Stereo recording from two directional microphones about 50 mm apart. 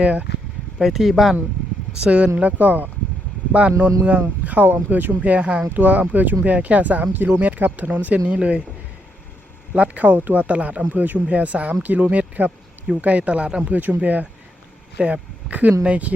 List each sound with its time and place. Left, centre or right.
0.0 s speech: right
0.8 s speech: centre
2.0 s speech: right
4.4 s speech: right
5.6 s speech: right
9.7 s speech: right